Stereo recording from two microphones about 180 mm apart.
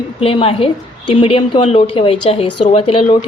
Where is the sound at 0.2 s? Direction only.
30° left (ahead or behind).